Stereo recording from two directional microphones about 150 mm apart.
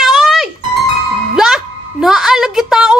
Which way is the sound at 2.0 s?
5° right (ahead or behind).